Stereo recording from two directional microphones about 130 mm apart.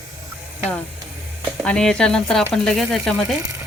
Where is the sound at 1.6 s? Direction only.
5° left (ahead or behind).